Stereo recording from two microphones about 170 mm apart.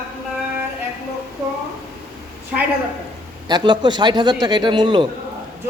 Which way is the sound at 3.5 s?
25° right (ahead or behind).